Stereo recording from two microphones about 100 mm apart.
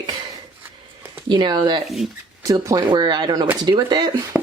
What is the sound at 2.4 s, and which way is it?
Speech, 40° right (ahead or behind).